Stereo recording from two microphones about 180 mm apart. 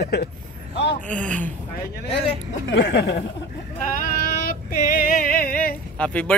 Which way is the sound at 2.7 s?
85° left.